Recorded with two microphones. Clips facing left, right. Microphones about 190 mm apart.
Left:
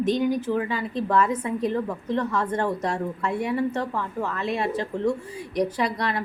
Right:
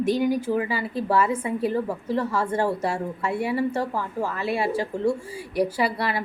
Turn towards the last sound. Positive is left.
turn(degrees=-5)  # may be behind; listen again after turning